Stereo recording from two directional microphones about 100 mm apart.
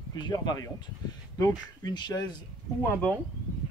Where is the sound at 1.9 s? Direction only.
45° left (ahead or behind).